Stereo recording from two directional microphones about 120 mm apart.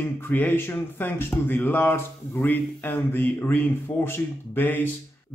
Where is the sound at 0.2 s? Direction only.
15° left (ahead or behind).